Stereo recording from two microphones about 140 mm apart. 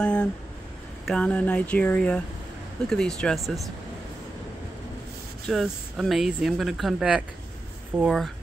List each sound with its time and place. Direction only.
0.0 s speech: 5° left (ahead or behind)
5.5 s speech: centre (ahead or behind)